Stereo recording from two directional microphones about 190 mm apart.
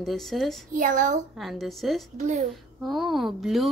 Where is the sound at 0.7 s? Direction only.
40° right (ahead or behind).